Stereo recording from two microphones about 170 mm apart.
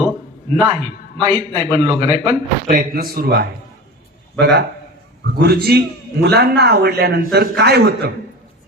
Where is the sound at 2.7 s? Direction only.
55° right (ahead or behind).